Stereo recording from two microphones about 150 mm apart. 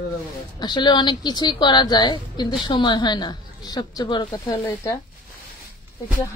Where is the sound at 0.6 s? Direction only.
30° left (ahead or behind).